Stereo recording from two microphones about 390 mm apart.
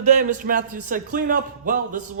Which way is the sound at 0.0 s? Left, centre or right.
Centre.